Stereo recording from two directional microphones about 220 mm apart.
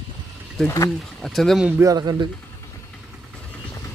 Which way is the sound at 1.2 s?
Centre (ahead or behind).